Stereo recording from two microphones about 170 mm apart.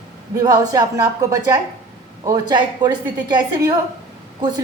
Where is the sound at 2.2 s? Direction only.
25° right (ahead or behind).